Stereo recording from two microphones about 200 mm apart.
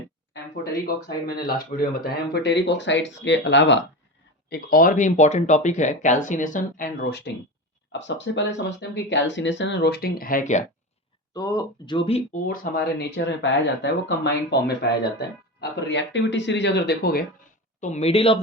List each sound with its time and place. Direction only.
1.0 s speech: 45° left (ahead or behind); by 3.8 s 65° left (ahead or behind)
4.4 s speech: 50° left (ahead or behind)
7.9 s speech: 65° left (ahead or behind); by 10.6 s 40° left (ahead or behind)
11.3 s speech: 20° left (ahead or behind)
12.5 s speech: 55° left (ahead or behind)
17.7 s speech: 35° left (ahead or behind)